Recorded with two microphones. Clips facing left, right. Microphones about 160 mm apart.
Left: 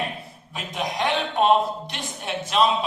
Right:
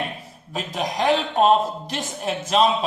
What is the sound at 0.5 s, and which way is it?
A man's voice, 40° right (ahead or behind).